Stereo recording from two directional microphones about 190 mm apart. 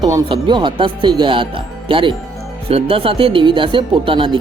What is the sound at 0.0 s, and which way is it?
Speech, 20° right (ahead or behind).